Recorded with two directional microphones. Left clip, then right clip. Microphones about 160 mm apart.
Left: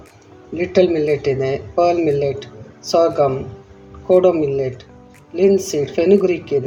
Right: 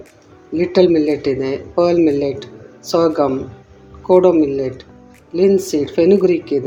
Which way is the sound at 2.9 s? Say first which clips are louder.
Even; 30° right (ahead or behind).